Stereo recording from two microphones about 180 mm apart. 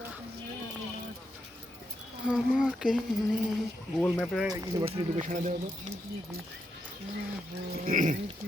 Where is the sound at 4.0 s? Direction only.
Centre (ahead or behind).